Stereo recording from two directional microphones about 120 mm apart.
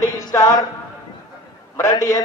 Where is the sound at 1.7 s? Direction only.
25° left (ahead or behind).